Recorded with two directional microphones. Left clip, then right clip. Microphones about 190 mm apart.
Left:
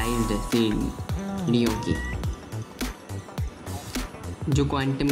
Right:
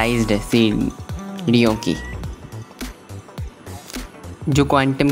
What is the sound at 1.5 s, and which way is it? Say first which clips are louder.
Speech: right 8 dB; 45° right (ahead or behind).